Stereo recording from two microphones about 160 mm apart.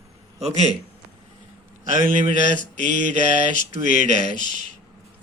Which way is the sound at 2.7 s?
50° right (ahead or behind).